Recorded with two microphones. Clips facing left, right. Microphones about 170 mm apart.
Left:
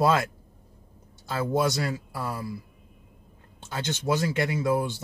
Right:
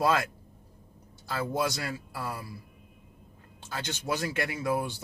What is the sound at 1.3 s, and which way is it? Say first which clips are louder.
Speech: left 5 dB; 25° left (ahead or behind).